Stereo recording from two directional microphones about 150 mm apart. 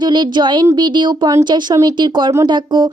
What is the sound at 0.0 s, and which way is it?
Speech, 30° right (ahead or behind).